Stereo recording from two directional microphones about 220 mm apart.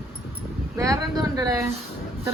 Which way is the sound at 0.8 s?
15° right (ahead or behind).